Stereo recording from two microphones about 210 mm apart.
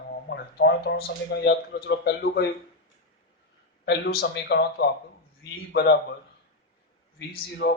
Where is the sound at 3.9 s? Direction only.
55° left (ahead or behind).